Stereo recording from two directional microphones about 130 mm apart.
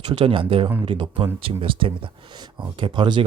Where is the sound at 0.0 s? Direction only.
45° right (ahead or behind).